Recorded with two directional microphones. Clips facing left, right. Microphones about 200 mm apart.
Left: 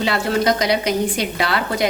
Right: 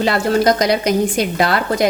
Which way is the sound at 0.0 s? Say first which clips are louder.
Right 4 dB; 45° right (ahead or behind).